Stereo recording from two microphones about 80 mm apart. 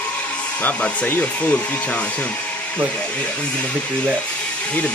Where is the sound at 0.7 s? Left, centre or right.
Left.